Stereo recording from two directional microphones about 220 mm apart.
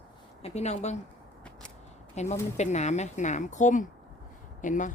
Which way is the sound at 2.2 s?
30° left (ahead or behind).